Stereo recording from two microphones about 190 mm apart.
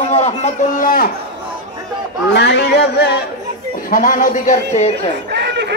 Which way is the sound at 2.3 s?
65° left (ahead or behind).